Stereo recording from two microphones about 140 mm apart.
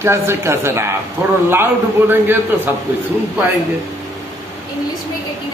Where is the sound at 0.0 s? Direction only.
20° right (ahead or behind).